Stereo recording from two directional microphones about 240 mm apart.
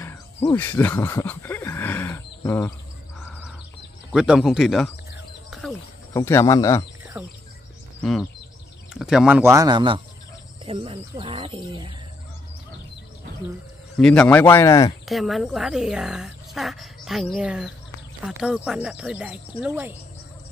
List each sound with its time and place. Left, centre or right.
0.0 s a sound: centre
4.1 s a woman's voice: centre
5.5 s bird: centre
6.1 s speech: centre
8.0 s speech: centre; by 11.9 s right
13.9 s speech: centre
15.0 s a woman's voice: centre